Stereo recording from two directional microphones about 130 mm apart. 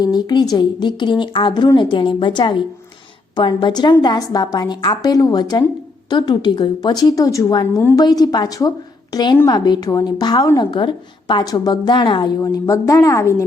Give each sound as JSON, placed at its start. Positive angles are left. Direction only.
{"t": 0.0, "sound": "a woman's voice", "side_deg": 30}
{"t": 12.4, "sound": "a woman's voice", "side_deg": 25}